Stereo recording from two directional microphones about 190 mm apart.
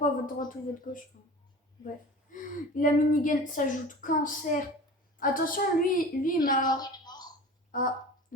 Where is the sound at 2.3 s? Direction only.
45° left (ahead or behind).